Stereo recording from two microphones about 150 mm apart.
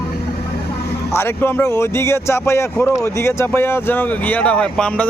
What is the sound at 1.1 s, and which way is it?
Speech, 15° left (ahead or behind).